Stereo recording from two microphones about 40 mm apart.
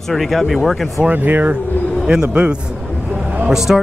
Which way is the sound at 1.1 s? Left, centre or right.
Right.